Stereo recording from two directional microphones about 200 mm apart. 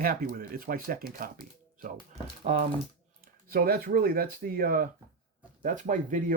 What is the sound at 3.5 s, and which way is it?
Speech, 50° right (ahead or behind).